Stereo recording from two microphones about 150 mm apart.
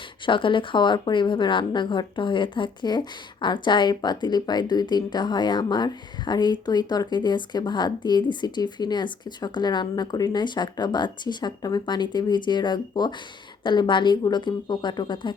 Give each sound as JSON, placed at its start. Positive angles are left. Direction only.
{"t": 0.3, "sound": "a woman's voice", "side_deg": 35}